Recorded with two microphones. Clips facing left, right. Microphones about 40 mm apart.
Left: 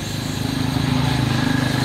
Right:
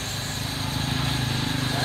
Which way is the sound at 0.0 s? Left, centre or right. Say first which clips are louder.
Left 6 dB; left.